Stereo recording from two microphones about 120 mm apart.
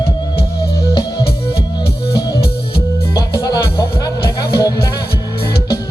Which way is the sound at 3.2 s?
35° left (ahead or behind).